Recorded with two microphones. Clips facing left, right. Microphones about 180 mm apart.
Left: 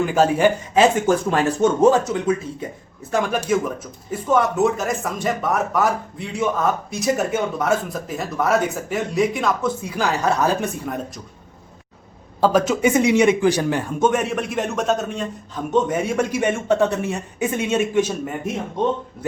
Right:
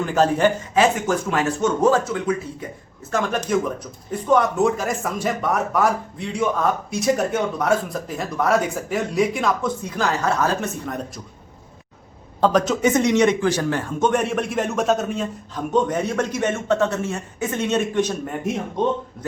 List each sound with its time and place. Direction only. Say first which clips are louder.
0.0 s a man's voice: left 1 dB; 10° left (ahead or behind)
0.7 s speech: left 3 dB; 25° left (ahead or behind)
1.8 s a man's voice: left 2 dB; 20° left (ahead or behind)
12.4 s a man's voice: left 1 dB; 5° left (ahead or behind)
14.1 s a man's voice: right 1 dB; centre (ahead or behind)